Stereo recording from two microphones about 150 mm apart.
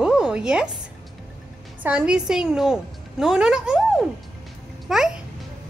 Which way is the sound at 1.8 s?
5° right (ahead or behind).